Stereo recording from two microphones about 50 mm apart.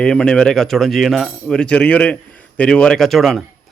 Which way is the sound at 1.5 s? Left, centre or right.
Centre.